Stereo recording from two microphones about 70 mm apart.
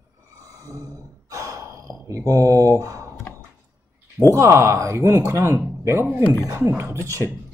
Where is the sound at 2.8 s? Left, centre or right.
Right.